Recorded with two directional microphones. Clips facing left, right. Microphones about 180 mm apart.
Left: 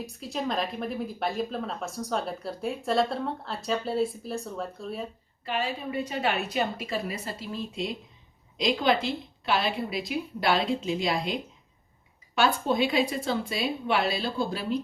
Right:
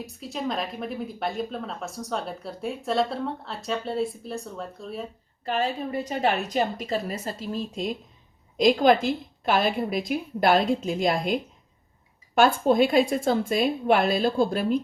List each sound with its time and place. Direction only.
0.0 s a woman's voice: centre (ahead or behind)
5.9 s a woman's voice: 40° right (ahead or behind)